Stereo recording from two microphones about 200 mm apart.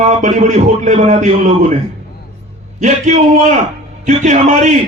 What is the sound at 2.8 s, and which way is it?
A man's voice, 35° right (ahead or behind).